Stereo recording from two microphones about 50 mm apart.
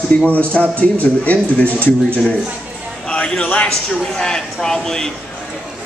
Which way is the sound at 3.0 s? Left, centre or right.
Centre.